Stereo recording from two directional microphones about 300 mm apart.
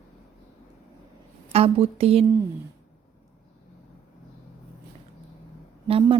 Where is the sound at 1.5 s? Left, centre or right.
Centre.